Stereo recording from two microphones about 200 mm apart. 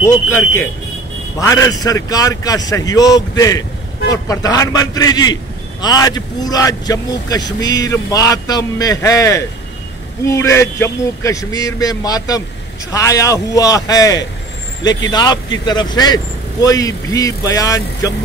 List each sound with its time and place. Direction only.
0.0 s a man's voice: 15° left (ahead or behind)